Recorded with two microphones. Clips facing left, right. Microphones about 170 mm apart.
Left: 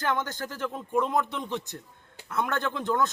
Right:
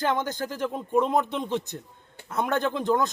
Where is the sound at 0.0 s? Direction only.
20° right (ahead or behind).